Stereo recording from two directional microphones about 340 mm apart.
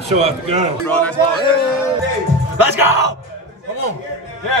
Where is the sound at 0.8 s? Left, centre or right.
Centre.